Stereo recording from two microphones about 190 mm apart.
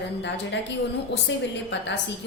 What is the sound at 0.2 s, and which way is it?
A woman's voice, 70° left (ahead or behind).